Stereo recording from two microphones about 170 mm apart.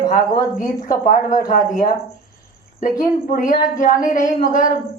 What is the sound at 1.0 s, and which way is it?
Speech, 50° left (ahead or behind).